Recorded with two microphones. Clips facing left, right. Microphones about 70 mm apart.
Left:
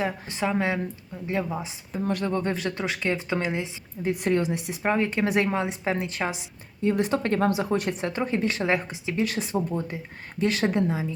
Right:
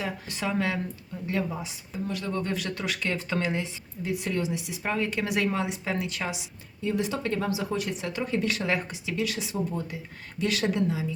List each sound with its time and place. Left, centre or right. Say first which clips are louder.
0.0 s speech: left 4 dB; left
2.0 s speech: left 6 dB; left
2.3 s speech: left 3 dB; left
4.0 s speech: left 5 dB; left
6.8 s speech: left 5 dB; left